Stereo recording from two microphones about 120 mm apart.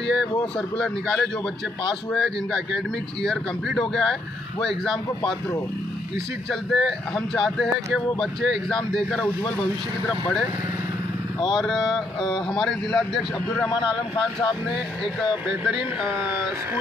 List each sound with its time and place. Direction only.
0.6 s speech: 5° left (ahead or behind)
6.5 s speech: centre (ahead or behind)
11.5 s speech: centre (ahead or behind)
13.8 s speech: 40° left (ahead or behind)
15.4 s speech: 5° right (ahead or behind)